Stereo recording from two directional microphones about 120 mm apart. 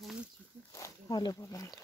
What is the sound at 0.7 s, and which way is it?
Speech, 25° left (ahead or behind).